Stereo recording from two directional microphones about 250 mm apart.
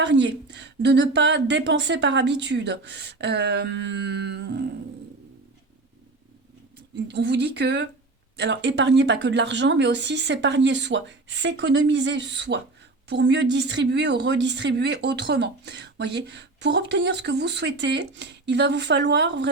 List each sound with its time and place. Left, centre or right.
0.0 s speech: right
7.1 s speech: right